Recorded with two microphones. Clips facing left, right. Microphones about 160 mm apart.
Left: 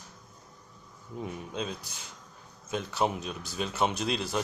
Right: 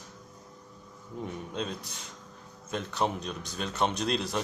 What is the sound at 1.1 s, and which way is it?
Speech, 5° left (ahead or behind).